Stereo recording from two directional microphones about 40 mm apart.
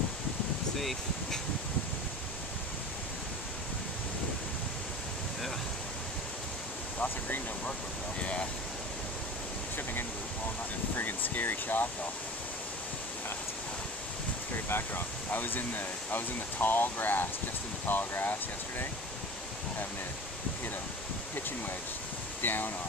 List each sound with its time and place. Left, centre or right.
0.7 s speech: centre
8.2 s waves: left
11.0 s speech: left
14.7 s speech: left
15.3 s speech: left
22.4 s speech: left